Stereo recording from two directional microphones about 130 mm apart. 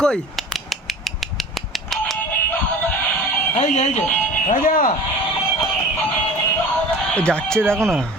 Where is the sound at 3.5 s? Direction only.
60° left (ahead or behind).